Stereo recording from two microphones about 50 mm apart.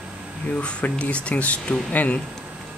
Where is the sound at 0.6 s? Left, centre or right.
Left.